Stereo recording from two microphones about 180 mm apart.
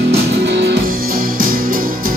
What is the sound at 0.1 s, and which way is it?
Music, 75° right (ahead or behind).